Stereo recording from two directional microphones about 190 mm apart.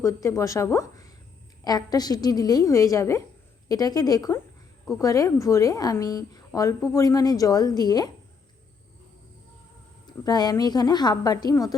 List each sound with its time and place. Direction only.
0.0 s a woman's voice: 15° left (ahead or behind)
10.1 s a woman's voice: 20° left (ahead or behind)